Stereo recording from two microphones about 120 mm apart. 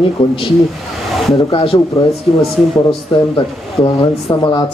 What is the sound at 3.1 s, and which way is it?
A man's voice, 45° left (ahead or behind).